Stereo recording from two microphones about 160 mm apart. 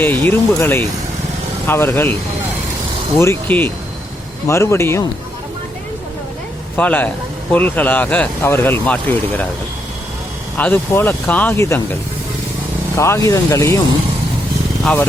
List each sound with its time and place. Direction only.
0.0 s speech: 10° left (ahead or behind)
3.2 s speech: 15° left (ahead or behind)
6.7 s speech: 10° left (ahead or behind)
10.6 s speech: 10° left (ahead or behind)
13.0 s speech: 20° left (ahead or behind)